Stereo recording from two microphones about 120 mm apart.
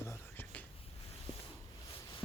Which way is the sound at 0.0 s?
20° left (ahead or behind).